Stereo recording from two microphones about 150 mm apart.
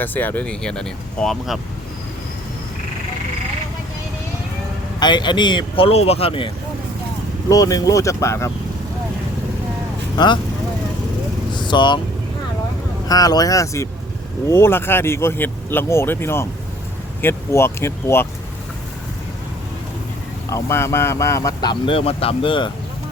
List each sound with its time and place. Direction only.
0.0 s speech: 10° left (ahead or behind)
4.9 s speech: 30° left (ahead or behind)
7.5 s speech: 25° left (ahead or behind)
10.2 s speech: 30° left (ahead or behind)
11.5 s vehicle: 30° left (ahead or behind)
13.1 s speech: 25° left (ahead or behind)
20.5 s speech: 20° left (ahead or behind); by 22.7 s 35° left (ahead or behind)